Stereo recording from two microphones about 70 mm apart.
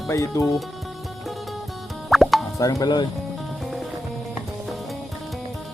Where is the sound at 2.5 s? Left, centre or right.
Left.